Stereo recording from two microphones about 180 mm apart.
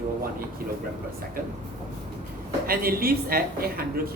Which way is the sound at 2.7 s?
55° right (ahead or behind).